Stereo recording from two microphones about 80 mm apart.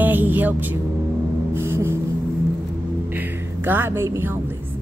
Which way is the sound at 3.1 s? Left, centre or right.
Right.